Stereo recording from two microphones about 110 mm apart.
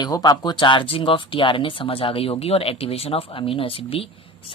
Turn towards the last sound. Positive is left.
turn(degrees=55)  # may be behind; listen again after turning